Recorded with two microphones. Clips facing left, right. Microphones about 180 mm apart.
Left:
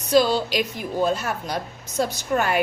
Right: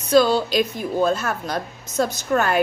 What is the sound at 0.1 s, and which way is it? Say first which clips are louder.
A woman's voice: right 2 dB; 15° left (ahead or behind).